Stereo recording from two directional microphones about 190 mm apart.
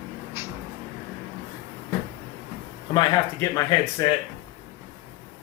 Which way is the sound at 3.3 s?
20° left (ahead or behind).